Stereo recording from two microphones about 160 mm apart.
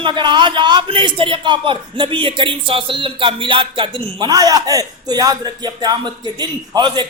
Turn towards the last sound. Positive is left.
turn(degrees=-25)  # may be behind; listen again after turning